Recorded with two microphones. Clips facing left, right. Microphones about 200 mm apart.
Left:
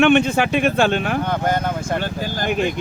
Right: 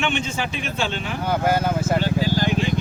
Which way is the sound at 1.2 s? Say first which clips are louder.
Even; 5° right (ahead or behind).